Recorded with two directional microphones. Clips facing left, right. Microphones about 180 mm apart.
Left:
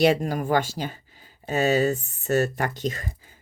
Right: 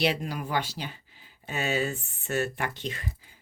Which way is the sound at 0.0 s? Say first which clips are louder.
Left 8 dB; 45° left (ahead or behind).